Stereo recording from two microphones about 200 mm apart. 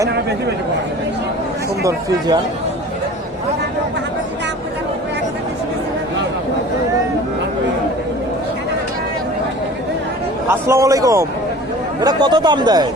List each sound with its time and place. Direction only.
1.8 s a man's voice: 15° right (ahead or behind)
10.7 s a man's voice: 15° right (ahead or behind)